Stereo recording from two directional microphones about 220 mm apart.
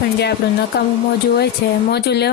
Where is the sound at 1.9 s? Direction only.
50° left (ahead or behind).